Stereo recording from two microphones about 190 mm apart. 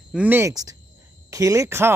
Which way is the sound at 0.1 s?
10° right (ahead or behind).